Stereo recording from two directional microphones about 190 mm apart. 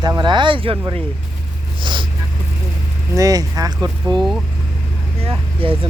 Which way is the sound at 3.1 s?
20° right (ahead or behind).